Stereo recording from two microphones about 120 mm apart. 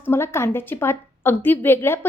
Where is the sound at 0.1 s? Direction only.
20° left (ahead or behind).